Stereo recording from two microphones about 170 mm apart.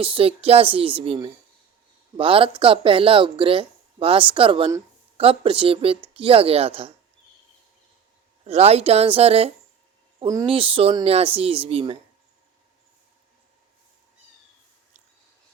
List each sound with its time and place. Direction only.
0.0 s speech: 30° right (ahead or behind)
8.4 s speech: 35° right (ahead or behind)
10.2 s speech: 20° right (ahead or behind)
10.4 s speech: 35° right (ahead or behind)